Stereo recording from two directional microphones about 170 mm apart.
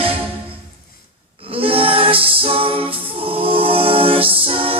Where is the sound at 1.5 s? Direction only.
35° right (ahead or behind).